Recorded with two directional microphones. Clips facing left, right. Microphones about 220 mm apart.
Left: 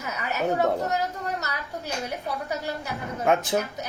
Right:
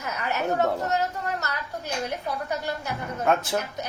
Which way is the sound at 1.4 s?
10° left (ahead or behind).